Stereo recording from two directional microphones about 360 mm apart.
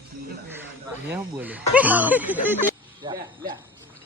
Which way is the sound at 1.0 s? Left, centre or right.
Centre.